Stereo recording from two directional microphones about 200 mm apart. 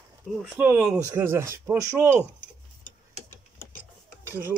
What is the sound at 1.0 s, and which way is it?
Cutlery, 10° right (ahead or behind).